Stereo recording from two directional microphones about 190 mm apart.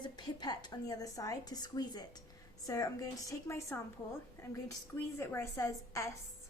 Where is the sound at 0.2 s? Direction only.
20° left (ahead or behind).